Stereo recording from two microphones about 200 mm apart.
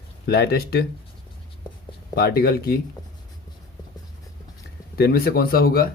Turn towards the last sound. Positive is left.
turn(degrees=50)  # may be behind; listen again after turning